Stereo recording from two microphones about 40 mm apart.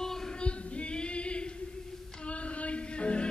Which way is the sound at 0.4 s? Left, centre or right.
Left.